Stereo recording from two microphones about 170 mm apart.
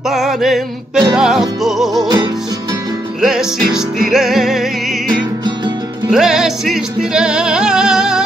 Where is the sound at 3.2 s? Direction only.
5° right (ahead or behind).